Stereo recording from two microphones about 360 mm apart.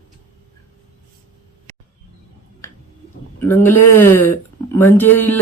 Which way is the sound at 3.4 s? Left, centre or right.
Centre.